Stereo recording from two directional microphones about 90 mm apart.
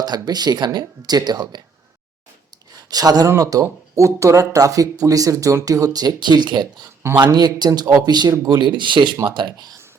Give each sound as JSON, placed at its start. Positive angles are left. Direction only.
{"t": 0.0, "sound": "speech", "side_deg": -50}
{"t": 2.7, "sound": "speech", "side_deg": -45}